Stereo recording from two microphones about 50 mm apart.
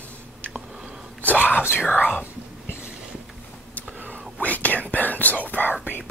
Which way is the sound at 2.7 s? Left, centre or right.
Right.